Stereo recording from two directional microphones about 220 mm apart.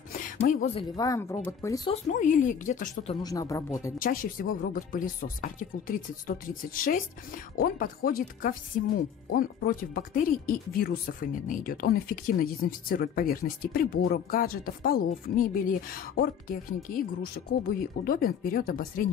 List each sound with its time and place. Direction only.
0.1 s a sound: 35° left (ahead or behind)
0.9 s speech: 15° left (ahead or behind)
1.9 s speech: 35° left (ahead or behind)
3.2 s speech: 15° left (ahead or behind)
4.0 s speech: 40° left (ahead or behind)